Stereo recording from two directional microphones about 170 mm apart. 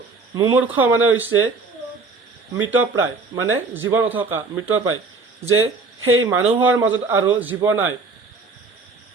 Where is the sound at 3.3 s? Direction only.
25° right (ahead or behind).